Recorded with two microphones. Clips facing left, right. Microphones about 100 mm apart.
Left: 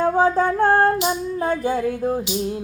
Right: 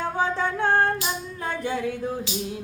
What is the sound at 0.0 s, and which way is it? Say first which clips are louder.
Music: left 8 dB; 45° left (ahead or behind).